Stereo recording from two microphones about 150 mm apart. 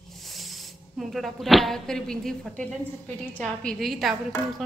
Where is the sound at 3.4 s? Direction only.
5° left (ahead or behind).